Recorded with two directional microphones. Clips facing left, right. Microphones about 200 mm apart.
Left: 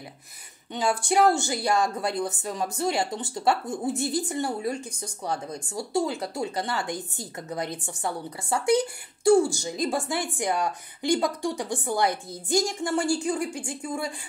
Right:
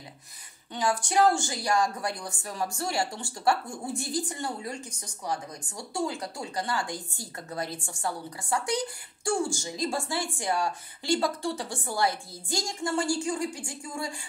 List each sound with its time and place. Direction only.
0.7 s speech: 25° left (ahead or behind)